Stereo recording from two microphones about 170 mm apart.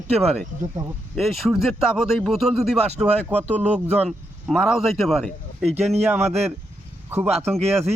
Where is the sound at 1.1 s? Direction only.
Centre (ahead or behind).